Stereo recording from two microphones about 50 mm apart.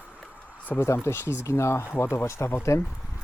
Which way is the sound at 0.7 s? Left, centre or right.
Left.